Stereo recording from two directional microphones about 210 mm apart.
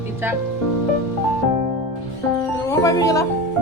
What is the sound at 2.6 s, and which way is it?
Music, 15° left (ahead or behind).